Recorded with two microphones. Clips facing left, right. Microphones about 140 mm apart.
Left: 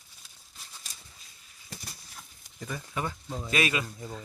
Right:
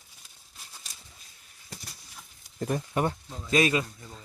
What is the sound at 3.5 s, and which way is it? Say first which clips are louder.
Speech: right 5 dB; 35° right (ahead or behind).